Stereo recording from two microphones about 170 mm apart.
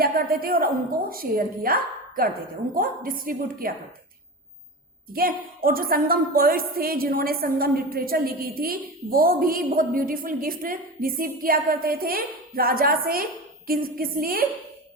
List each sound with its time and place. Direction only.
0.0 s a woman's voice: 60° right (ahead or behind)
5.1 s a woman's voice: 60° right (ahead or behind)